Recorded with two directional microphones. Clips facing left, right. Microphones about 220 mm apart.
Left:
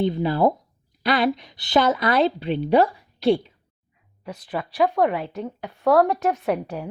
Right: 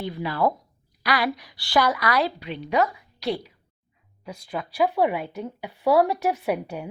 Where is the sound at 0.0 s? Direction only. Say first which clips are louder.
Left 5 dB; 25° left (ahead or behind).